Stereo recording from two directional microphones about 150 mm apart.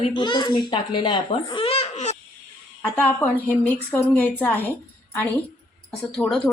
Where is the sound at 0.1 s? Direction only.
30° left (ahead or behind).